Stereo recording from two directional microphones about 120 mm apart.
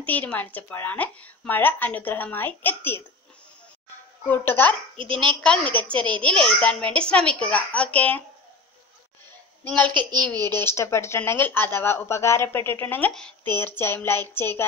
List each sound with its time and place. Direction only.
0.0 s a woman's voice: 15° left (ahead or behind)
4.2 s a woman's voice: 15° left (ahead or behind)
4.9 s a child's voice: 45° right (ahead or behind)
5.2 s a woman's voice: 10° left (ahead or behind)
9.7 s a woman's voice: 10° left (ahead or behind)
9.9 s a woman's voice: 35° right (ahead or behind)
10.5 s speech: 20° left (ahead or behind)
13.1 s speech: 5° left (ahead or behind)
13.6 s a woman's voice: 20° left (ahead or behind)